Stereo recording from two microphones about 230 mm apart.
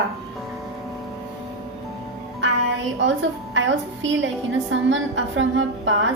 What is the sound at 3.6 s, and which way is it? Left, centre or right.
A woman's voice, right.